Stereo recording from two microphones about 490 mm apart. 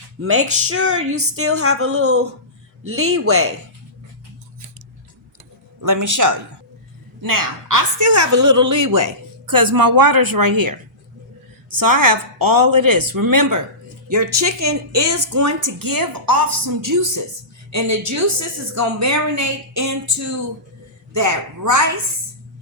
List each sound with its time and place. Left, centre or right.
0.2 s speech: right
5.8 s a woman's voice: right
11.8 s a woman's voice: right